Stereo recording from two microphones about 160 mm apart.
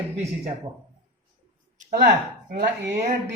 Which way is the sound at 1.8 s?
65° right (ahead or behind).